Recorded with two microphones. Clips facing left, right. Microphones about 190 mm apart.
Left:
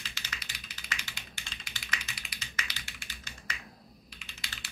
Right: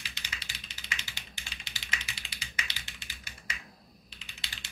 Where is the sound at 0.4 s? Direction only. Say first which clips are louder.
Even; 25° right (ahead or behind).